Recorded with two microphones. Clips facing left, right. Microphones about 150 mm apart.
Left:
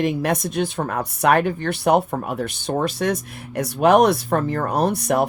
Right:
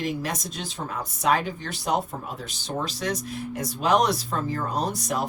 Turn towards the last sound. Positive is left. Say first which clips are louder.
# left 8 dB
turn(degrees=60)  # may be behind; listen again after turning